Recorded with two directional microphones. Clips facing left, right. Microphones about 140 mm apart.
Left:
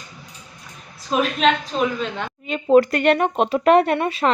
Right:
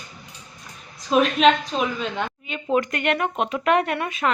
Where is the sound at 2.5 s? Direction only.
35° left (ahead or behind).